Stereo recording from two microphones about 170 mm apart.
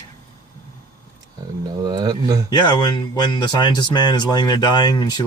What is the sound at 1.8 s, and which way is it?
Speech, 25° right (ahead or behind).